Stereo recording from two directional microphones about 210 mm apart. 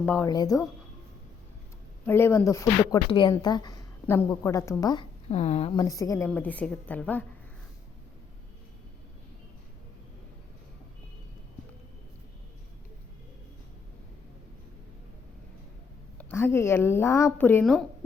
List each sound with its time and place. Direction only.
0.0 s speech: 5° left (ahead or behind)
0.3 s speech: 15° left (ahead or behind)
2.0 s speech: 10° left (ahead or behind)
5.3 s speech: 30° left (ahead or behind)
5.8 s speech: 15° left (ahead or behind)
16.1 s speech: 10° left (ahead or behind)